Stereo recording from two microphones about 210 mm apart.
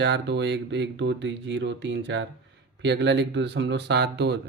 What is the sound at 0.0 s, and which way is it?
Speech, 55° right (ahead or behind).